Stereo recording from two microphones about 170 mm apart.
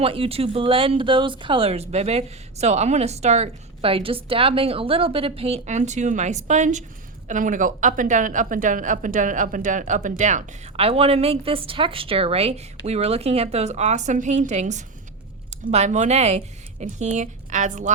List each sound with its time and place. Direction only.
0.0 s speech: 35° right (ahead or behind)